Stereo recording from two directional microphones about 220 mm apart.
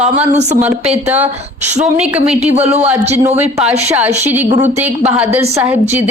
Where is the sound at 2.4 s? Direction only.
30° right (ahead or behind).